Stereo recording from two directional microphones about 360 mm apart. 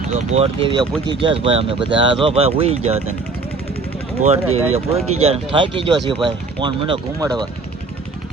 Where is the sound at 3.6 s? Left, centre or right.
Left.